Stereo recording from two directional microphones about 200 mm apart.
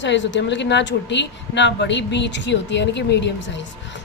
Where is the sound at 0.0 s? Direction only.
65° left (ahead or behind).